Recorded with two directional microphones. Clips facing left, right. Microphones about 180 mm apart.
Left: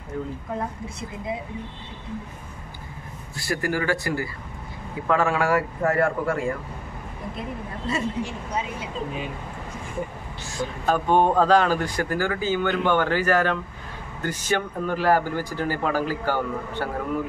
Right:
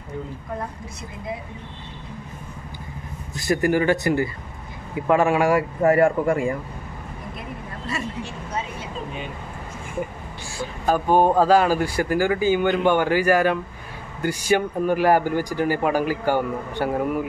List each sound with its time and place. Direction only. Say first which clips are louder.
3.3 s speech: right 6 dB; 20° right (ahead or behind)
7.9 s a woman's voice: left 3 dB; 15° left (ahead or behind)
10.5 s speech: right 1 dB; 5° right (ahead or behind)